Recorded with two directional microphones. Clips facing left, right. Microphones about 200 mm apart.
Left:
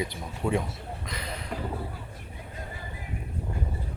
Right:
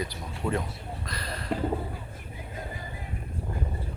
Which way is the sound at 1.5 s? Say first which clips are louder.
Right 7 dB; 50° right (ahead or behind).